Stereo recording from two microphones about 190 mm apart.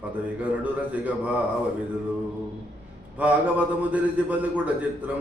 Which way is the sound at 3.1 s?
5° right (ahead or behind).